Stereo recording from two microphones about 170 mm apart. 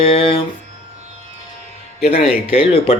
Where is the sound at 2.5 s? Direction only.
35° left (ahead or behind).